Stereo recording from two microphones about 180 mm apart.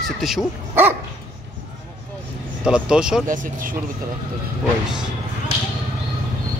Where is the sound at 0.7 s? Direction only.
10° right (ahead or behind).